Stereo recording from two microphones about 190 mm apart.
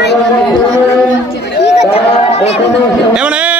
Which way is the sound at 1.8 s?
30° left (ahead or behind).